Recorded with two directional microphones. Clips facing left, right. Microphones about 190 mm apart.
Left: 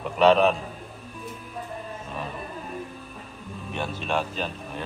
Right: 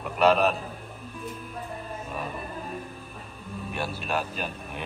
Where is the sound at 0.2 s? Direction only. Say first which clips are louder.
Left 3 dB; 5° right (ahead or behind).